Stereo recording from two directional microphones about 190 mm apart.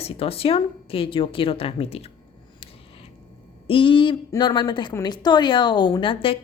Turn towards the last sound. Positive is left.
turn(degrees=30)  # may be behind; listen again after turning